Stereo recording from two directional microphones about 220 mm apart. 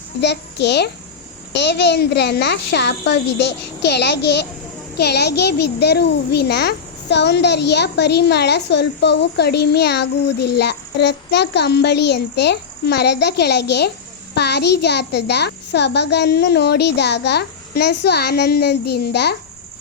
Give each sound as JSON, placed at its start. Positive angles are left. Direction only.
{"t": 0.2, "sound": "a child's voice", "side_deg": 50}